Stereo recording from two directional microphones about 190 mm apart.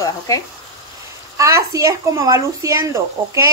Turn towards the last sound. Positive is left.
turn(degrees=-15)  # may be behind; listen again after turning